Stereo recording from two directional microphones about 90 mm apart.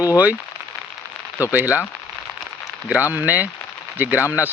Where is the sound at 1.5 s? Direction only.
20° right (ahead or behind).